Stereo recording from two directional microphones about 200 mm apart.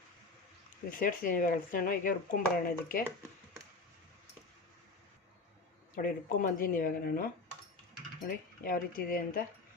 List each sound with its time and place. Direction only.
0.9 s speech: 45° left (ahead or behind)
5.9 s speech: 40° left (ahead or behind)
8.6 s speech: 45° left (ahead or behind)